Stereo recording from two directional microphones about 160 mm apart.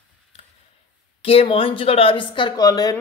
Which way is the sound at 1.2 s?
35° left (ahead or behind).